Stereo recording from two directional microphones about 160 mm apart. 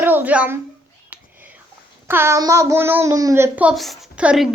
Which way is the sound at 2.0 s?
15° right (ahead or behind).